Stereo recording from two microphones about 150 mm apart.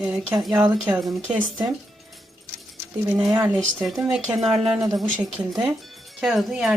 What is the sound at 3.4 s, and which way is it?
Speech, centre (ahead or behind).